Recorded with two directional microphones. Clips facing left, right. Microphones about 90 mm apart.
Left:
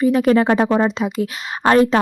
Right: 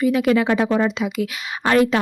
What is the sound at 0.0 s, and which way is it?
Speech, 35° left (ahead or behind).